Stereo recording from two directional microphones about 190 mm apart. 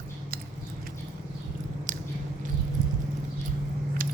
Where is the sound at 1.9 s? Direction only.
45° right (ahead or behind).